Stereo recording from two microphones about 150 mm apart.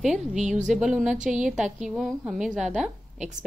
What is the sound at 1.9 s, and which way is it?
A woman's voice, 5° right (ahead or behind).